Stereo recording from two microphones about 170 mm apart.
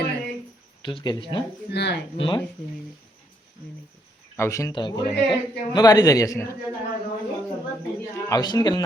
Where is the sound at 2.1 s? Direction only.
30° left (ahead or behind).